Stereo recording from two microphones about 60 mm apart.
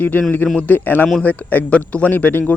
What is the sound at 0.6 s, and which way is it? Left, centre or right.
Speech, left.